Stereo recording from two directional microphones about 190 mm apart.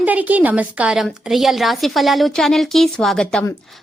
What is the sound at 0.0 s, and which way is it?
A woman's voice, 10° right (ahead or behind).